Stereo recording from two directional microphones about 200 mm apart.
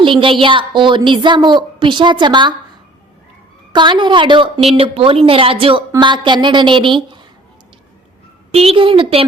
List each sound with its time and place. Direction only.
0.0 s a woman's voice: 25° right (ahead or behind)
3.7 s a woman's voice: 25° right (ahead or behind)
8.5 s a woman's voice: 25° right (ahead or behind)